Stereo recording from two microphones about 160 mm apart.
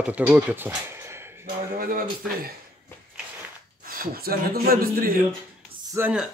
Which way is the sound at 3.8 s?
65° right (ahead or behind).